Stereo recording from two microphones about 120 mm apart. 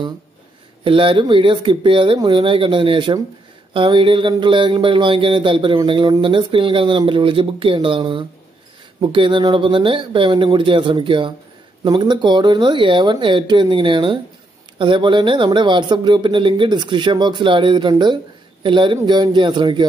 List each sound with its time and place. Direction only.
0.8 s speech: 45° right (ahead or behind)